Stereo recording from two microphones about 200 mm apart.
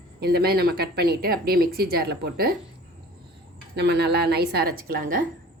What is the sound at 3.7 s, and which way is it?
Speech, 55° right (ahead or behind).